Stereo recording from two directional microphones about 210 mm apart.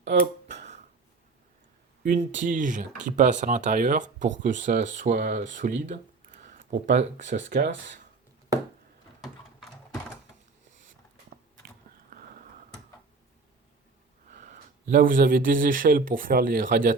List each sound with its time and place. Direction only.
0.4 s a sound: 35° right (ahead or behind)
2.0 s speech: 35° right (ahead or behind)
7.6 s speech: 60° right (ahead or behind)
9.2 s typing: centre (ahead or behind)
12.1 s a sound: 40° right (ahead or behind)
14.3 s speech: 40° right (ahead or behind)